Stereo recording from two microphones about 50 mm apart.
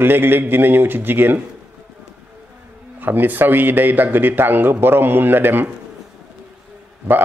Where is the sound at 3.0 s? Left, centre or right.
Right.